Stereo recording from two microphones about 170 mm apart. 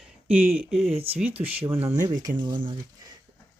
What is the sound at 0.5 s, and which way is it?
Speech, 5° right (ahead or behind).